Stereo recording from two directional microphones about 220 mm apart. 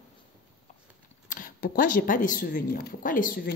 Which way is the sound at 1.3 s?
40° left (ahead or behind).